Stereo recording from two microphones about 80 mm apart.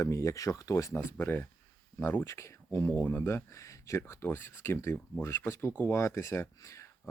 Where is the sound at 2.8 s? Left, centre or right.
Centre.